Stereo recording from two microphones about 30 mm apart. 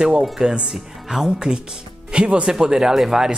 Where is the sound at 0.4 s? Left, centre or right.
Right.